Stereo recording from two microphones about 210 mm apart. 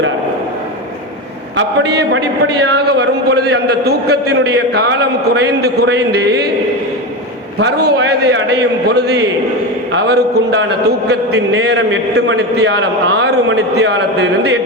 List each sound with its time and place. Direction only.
1.5 s a man's voice: 60° right (ahead or behind)
7.6 s a man's voice: 55° right (ahead or behind)